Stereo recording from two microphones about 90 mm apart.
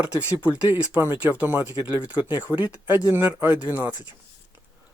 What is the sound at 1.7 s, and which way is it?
Speech, 45° left (ahead or behind).